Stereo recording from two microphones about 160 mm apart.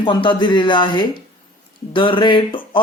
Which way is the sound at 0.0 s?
30° left (ahead or behind).